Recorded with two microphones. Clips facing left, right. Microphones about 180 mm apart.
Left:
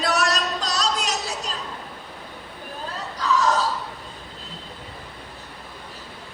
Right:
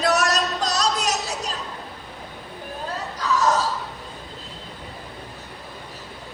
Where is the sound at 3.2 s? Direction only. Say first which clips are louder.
Even; 40° right (ahead or behind).